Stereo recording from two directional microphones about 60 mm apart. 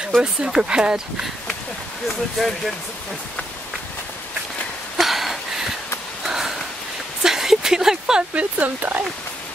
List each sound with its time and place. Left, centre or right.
0.2 s speech: centre
2.3 s speech: centre
4.9 s a sound: centre
6.2 s sniff: centre
7.2 s a sound: centre
8.4 s speech: right